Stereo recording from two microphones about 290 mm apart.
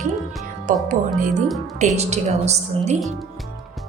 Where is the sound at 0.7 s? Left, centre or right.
Right.